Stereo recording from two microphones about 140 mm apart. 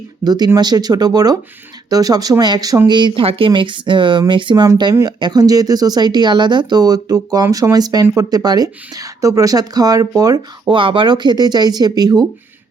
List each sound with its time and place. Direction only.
0.3 s speech: 30° right (ahead or behind)